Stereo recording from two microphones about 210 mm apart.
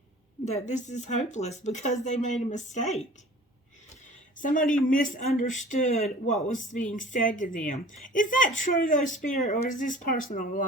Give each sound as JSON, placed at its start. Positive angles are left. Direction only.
{"t": 0.4, "sound": "speech", "side_deg": 35}
{"t": 4.4, "sound": "speech", "side_deg": 40}